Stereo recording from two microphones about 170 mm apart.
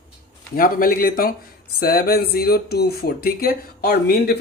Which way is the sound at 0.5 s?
55° left (ahead or behind).